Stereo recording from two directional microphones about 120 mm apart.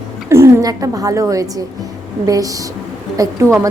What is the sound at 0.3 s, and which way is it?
Speech, 20° right (ahead or behind).